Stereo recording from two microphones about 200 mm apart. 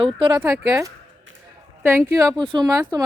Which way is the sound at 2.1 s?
15° right (ahead or behind).